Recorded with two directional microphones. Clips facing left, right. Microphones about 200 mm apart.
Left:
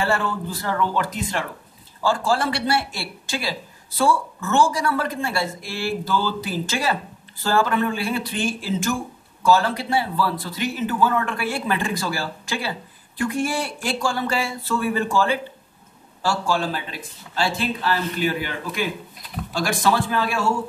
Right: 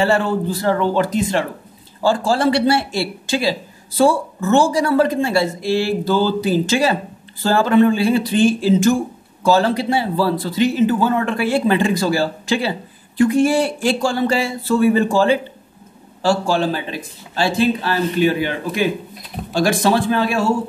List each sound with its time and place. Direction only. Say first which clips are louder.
0.0 s a man's voice: right 7 dB; 25° right (ahead or behind)
2.0 s a man's voice: right 5 dB; 30° right (ahead or behind)
18.2 s a man's voice: right 7 dB; 25° right (ahead or behind)